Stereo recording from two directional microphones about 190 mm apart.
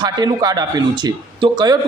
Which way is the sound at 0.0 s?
20° right (ahead or behind).